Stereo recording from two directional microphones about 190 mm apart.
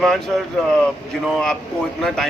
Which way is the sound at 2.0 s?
Centre (ahead or behind).